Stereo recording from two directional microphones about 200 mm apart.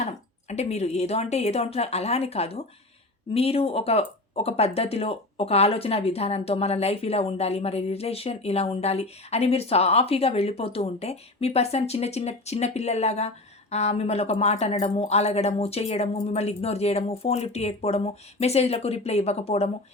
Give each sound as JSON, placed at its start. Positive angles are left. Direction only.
{"t": 0.0, "sound": "speech", "side_deg": 35}